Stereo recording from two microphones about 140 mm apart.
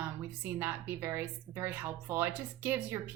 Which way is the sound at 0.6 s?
15° right (ahead or behind).